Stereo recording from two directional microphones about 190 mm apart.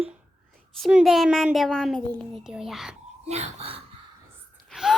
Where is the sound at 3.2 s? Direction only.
35° right (ahead or behind).